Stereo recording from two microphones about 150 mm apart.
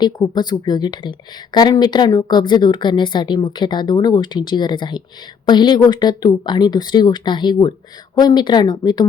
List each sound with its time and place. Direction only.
0.0 s speech: 30° left (ahead or behind)